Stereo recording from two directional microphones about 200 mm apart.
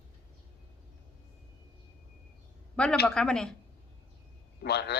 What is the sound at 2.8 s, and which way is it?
Speech, 5° left (ahead or behind).